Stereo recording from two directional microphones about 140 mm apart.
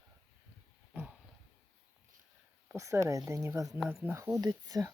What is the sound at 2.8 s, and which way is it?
Speech, 20° right (ahead or behind).